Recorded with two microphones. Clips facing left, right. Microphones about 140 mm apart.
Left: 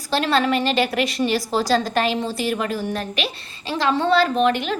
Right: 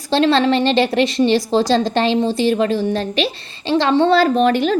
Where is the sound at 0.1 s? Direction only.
30° right (ahead or behind).